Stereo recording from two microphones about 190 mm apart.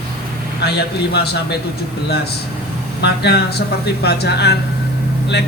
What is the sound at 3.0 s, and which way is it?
Speech, 60° left (ahead or behind).